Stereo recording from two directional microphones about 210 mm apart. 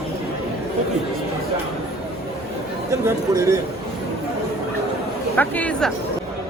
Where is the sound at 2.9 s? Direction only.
15° right (ahead or behind).